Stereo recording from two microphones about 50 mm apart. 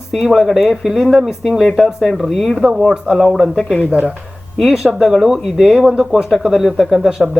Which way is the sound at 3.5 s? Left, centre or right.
Centre.